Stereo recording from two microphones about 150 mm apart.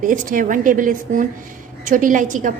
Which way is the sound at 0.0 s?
60° right (ahead or behind).